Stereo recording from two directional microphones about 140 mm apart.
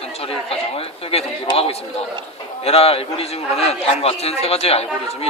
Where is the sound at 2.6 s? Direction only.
45° left (ahead or behind).